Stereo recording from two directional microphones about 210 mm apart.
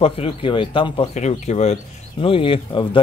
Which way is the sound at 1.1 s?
35° left (ahead or behind).